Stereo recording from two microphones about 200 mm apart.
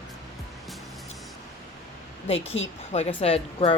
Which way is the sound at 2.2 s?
30° left (ahead or behind).